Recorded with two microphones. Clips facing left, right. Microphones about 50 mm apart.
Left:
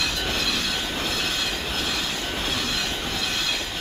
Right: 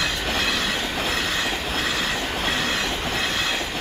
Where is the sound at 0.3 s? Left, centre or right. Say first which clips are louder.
Right 3 dB; right.